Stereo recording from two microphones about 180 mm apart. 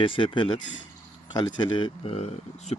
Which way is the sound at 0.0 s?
30° left (ahead or behind).